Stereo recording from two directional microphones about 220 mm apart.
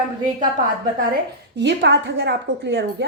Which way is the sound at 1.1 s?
50° right (ahead or behind).